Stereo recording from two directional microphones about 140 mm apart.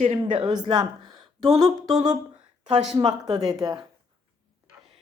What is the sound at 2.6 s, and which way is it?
Speech, 55° right (ahead or behind).